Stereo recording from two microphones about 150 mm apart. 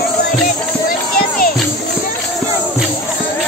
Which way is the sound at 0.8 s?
70° left (ahead or behind).